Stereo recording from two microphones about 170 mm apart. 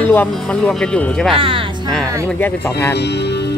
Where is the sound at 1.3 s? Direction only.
30° right (ahead or behind).